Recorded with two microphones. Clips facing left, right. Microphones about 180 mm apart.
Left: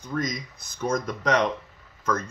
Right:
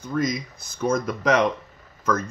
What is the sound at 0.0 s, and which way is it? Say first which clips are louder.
Speech: right 4 dB; 5° right (ahead or behind).